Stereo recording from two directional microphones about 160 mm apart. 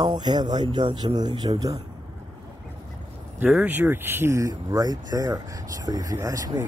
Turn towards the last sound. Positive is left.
turn(degrees=-20)  # may be behind; listen again after turning